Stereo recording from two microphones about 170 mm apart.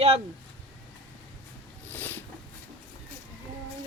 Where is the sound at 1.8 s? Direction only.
10° left (ahead or behind).